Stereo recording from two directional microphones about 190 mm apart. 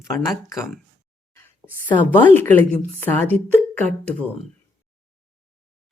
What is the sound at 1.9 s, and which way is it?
Speech, 10° left (ahead or behind).